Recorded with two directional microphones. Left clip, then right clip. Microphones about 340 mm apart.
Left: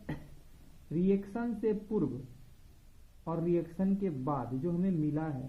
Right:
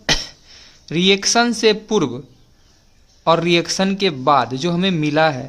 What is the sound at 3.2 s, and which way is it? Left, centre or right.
A man's voice, right.